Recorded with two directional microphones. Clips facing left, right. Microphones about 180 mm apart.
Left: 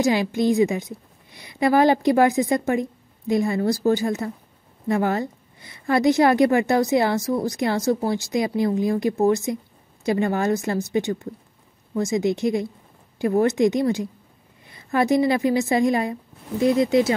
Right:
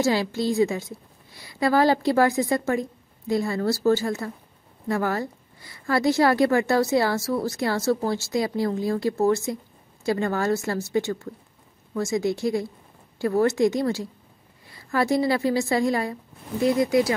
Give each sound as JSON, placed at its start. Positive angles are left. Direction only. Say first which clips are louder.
{"t": 0.0, "sound": "a woman's voice", "louder": "left 3 dB", "side_deg": 15}